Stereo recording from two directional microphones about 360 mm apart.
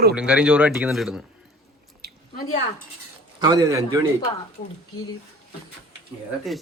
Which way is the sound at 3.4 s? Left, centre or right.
Centre.